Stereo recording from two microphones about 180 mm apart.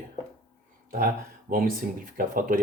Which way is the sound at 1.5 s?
50° right (ahead or behind).